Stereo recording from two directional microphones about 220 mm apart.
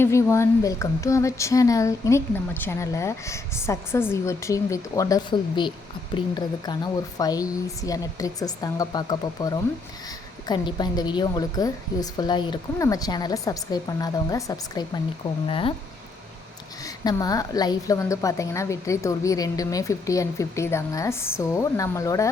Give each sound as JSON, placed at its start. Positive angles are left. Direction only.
{"t": 0.0, "sound": "a woman's voice", "side_deg": 10}
{"t": 16.8, "sound": "a woman's voice", "side_deg": 15}